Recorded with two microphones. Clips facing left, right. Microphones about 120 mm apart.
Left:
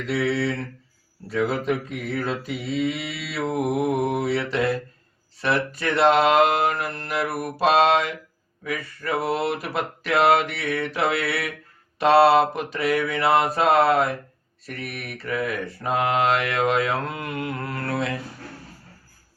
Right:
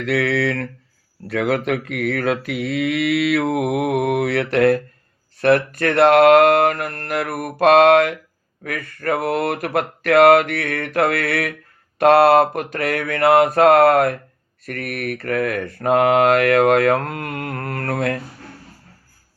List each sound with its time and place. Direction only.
0.0 s mantra: 70° right (ahead or behind); by 18.2 s 55° right (ahead or behind)